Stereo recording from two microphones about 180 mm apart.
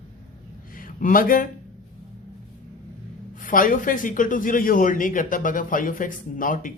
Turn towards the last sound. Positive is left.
turn(degrees=50)  # may be behind; listen again after turning